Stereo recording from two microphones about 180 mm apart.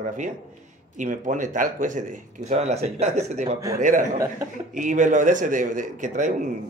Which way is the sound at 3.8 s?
45° right (ahead or behind).